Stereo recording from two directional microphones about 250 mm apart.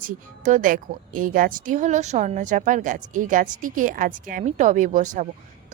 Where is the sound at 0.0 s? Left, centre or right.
Right.